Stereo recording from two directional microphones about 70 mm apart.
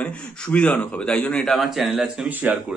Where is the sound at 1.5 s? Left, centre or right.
Centre.